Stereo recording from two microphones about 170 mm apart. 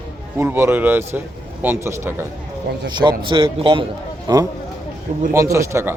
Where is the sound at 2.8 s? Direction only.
25° right (ahead or behind).